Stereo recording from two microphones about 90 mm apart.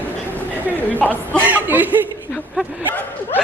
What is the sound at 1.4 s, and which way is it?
Speech, 20° right (ahead or behind).